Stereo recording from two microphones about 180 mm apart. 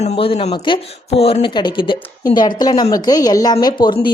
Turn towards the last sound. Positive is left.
turn(degrees=25)  # may be behind; listen again after turning